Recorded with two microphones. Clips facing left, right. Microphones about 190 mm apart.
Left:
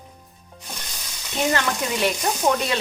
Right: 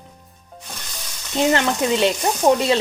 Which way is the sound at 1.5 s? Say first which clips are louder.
Right 5 dB; 25° right (ahead or behind).